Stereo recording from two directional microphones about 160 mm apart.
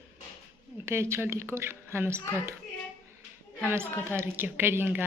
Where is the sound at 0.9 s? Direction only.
15° right (ahead or behind).